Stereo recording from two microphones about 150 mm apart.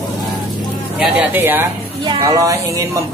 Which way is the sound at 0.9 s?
10° right (ahead or behind).